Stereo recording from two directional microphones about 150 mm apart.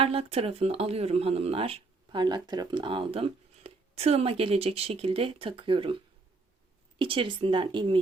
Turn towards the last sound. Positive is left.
turn(degrees=-35)  # may be behind; listen again after turning